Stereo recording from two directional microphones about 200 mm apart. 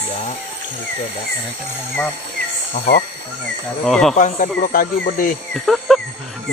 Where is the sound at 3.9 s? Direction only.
Centre (ahead or behind).